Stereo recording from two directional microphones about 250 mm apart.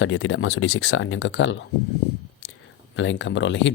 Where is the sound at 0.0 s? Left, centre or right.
Left.